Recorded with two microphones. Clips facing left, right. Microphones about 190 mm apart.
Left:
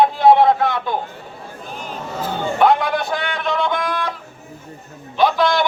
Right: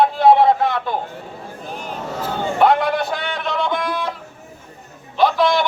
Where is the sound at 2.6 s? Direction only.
5° right (ahead or behind).